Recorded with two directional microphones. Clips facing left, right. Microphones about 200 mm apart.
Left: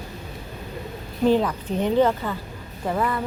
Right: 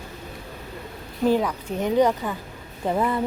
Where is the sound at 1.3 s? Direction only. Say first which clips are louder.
Left 1 dB; 10° right (ahead or behind).